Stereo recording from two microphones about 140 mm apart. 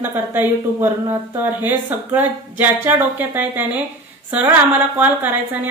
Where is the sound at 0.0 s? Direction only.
15° right (ahead or behind).